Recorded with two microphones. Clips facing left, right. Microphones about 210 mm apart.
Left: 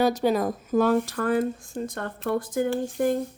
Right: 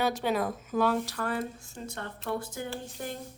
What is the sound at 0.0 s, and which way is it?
Speech, 40° left (ahead or behind).